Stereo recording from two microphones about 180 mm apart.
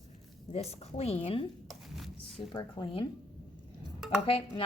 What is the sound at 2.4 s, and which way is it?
Speech, 25° left (ahead or behind).